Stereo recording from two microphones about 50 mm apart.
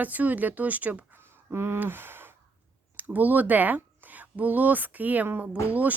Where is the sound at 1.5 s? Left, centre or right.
Right.